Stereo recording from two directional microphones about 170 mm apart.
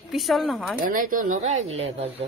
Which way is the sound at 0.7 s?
55° right (ahead or behind).